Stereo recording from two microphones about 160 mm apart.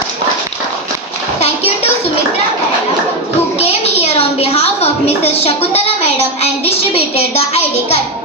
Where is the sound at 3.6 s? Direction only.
40° left (ahead or behind).